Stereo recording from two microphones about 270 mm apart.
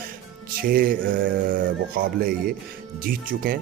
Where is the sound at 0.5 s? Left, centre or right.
Right.